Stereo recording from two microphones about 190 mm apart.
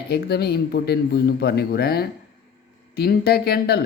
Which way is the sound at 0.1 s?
55° left (ahead or behind).